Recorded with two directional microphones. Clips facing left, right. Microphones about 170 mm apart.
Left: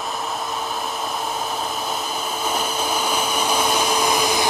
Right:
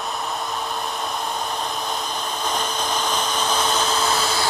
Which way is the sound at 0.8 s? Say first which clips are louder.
Left 1 dB; 5° left (ahead or behind).